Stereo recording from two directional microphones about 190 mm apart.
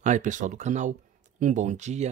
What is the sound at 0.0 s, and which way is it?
Speech, 40° right (ahead or behind).